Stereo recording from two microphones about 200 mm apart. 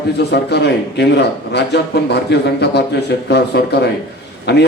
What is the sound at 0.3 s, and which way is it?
A man's voice, 55° left (ahead or behind).